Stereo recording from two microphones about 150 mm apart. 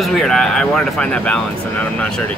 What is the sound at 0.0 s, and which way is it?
Speech, 5° left (ahead or behind).